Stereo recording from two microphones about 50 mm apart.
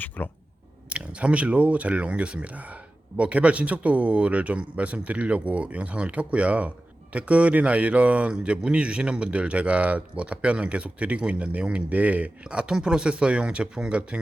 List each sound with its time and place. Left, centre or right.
0.2 s speech: left
0.9 s speech: right